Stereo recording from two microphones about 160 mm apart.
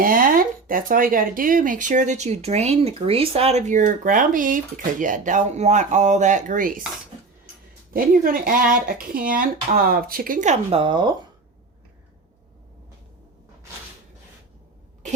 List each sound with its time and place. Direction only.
0.0 s speech: 60° right (ahead or behind)
7.9 s speech: 60° right (ahead or behind); by 11.2 s 30° right (ahead or behind)